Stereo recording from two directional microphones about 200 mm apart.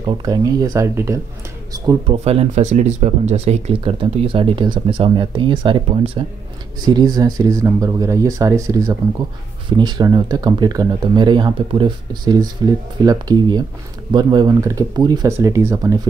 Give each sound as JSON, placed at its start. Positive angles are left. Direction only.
{"t": 0.0, "sound": "speech", "side_deg": -20}
{"t": 2.2, "sound": "speech", "side_deg": -30}